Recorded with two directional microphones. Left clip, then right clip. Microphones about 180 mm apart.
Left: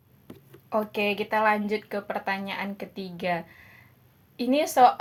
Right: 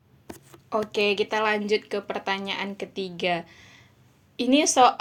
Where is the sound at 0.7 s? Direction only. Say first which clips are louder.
Right 2 dB; 25° right (ahead or behind).